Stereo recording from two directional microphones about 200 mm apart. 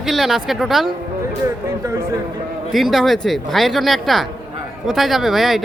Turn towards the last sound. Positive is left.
turn(degrees=0)  # may be behind; listen again after turning